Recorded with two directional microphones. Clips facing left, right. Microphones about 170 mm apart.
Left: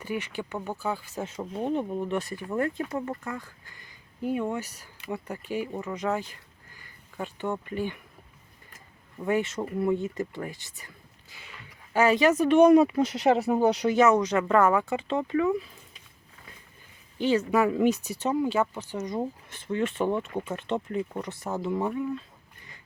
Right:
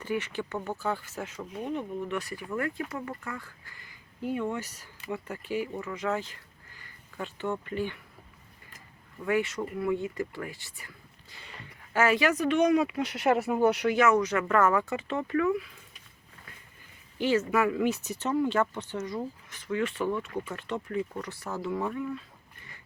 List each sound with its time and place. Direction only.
0.0 s speech: 15° left (ahead or behind)
1.2 s speech: 30° left (ahead or behind); by 7.9 s 15° left (ahead or behind)
9.2 s speech: 25° left (ahead or behind)
11.9 s speech: 20° left (ahead or behind)
12.9 s speech: 40° left (ahead or behind)
14.0 s speech: 20° left (ahead or behind)
17.2 s speech: 15° left (ahead or behind)